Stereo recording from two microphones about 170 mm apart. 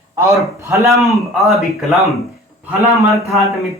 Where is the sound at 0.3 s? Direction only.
15° right (ahead or behind).